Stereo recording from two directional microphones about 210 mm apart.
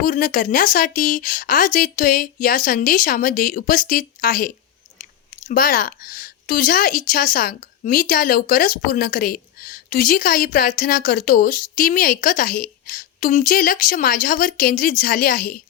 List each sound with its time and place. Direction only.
0.0 s a woman's voice: 40° left (ahead or behind)